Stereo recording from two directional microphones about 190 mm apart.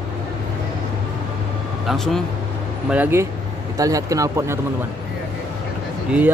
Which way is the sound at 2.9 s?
10° right (ahead or behind).